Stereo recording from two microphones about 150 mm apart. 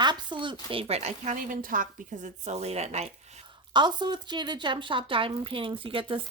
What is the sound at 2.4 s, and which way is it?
Speech, 45° right (ahead or behind).